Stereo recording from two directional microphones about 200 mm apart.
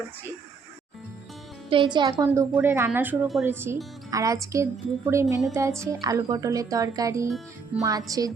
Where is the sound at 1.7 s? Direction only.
25° right (ahead or behind).